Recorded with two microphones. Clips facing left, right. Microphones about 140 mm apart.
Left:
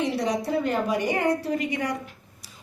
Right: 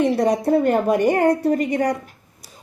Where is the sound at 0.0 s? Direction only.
50° right (ahead or behind).